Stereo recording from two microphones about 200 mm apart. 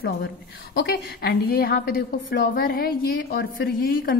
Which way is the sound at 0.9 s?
55° left (ahead or behind).